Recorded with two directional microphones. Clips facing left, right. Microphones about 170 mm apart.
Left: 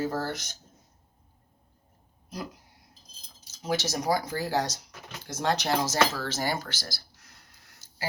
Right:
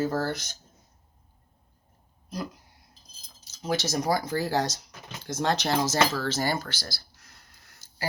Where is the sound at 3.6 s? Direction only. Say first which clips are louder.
Right 1 dB; 15° left (ahead or behind).